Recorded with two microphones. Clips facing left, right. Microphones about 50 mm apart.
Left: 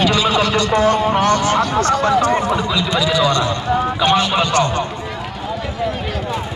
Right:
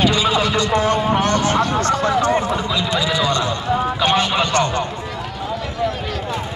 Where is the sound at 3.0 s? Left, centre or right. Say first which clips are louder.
Left 5 dB; right.